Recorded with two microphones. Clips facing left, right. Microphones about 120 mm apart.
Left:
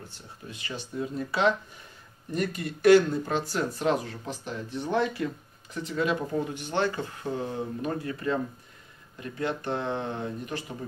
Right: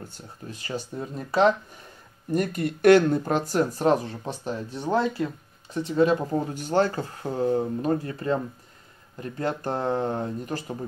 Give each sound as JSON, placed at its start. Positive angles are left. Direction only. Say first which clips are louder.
{"t": 0.1, "sound": "speech", "louder": "right 4 dB", "side_deg": -40}
{"t": 2.3, "sound": "speech", "louder": "right 5 dB", "side_deg": -55}